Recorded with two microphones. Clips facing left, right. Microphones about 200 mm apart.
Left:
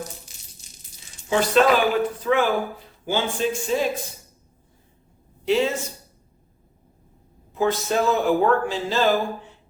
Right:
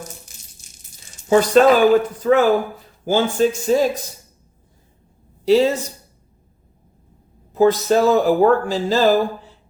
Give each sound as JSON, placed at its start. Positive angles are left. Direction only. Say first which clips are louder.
{"t": 0.3, "sound": "a sound", "louder": "right 3 dB", "side_deg": -50}
{"t": 1.3, "sound": "speech", "louder": "right 6 dB", "side_deg": -45}
{"t": 5.5, "sound": "speech", "louder": "right 6 dB", "side_deg": -35}
{"t": 7.5, "sound": "speech", "louder": "right 7 dB", "side_deg": -40}